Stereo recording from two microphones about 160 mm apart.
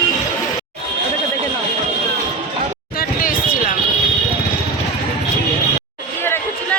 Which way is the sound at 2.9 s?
60° left (ahead or behind).